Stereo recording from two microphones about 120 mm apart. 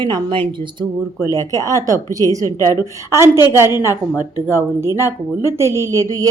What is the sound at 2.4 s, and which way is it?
Speech, 25° left (ahead or behind).